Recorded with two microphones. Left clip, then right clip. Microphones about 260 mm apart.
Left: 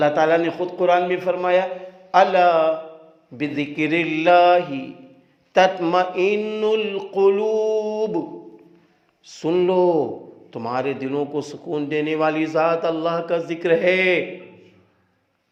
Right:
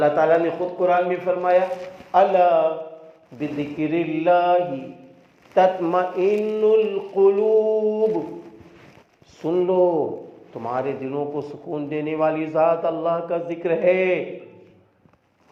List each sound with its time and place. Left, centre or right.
0.0 s a man's voice: left
9.3 s a man's voice: left